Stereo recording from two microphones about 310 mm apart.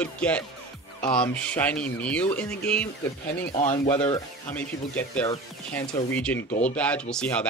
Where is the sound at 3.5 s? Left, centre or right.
Left.